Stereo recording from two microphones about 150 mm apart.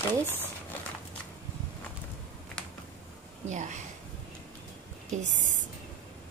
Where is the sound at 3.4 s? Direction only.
55° right (ahead or behind).